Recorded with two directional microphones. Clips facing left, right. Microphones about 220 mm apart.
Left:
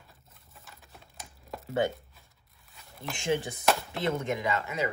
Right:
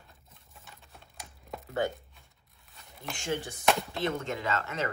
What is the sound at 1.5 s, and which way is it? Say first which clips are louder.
Chopping: even; centre (ahead or behind).